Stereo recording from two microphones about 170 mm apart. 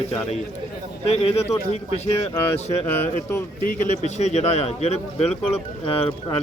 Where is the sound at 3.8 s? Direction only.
40° left (ahead or behind).